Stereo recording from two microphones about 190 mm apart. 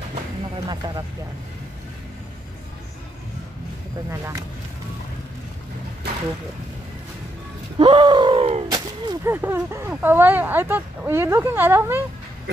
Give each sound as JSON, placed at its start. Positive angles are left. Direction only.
{"t": 0.7, "sound": "speech", "side_deg": -20}
{"t": 4.1, "sound": "speech", "side_deg": -15}
{"t": 7.8, "sound": "gasp", "side_deg": -25}
{"t": 8.6, "sound": "artillery fire", "side_deg": -20}
{"t": 9.3, "sound": "speech", "side_deg": -10}